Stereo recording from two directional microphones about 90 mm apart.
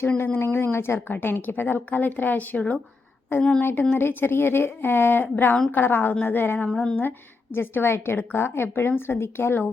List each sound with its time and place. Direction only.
0.3 s a woman's voice: 25° left (ahead or behind)